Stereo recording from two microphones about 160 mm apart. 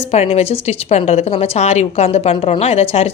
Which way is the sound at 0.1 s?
40° left (ahead or behind).